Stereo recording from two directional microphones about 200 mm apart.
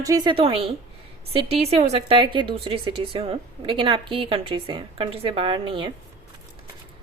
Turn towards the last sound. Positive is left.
turn(degrees=-25)  # may be behind; listen again after turning